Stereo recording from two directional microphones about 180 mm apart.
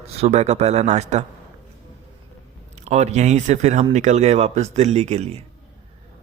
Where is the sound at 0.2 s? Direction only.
35° right (ahead or behind).